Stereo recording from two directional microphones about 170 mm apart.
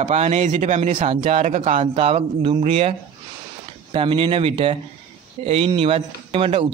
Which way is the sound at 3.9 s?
30° right (ahead or behind).